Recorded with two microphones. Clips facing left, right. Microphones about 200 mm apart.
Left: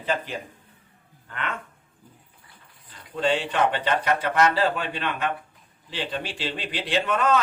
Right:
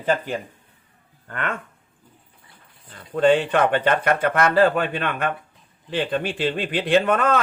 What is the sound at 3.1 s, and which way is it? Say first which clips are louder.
Speech: right 7 dB; 55° right (ahead or behind).